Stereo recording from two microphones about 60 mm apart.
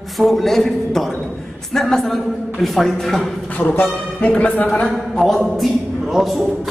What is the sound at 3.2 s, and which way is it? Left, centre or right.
Speech, left.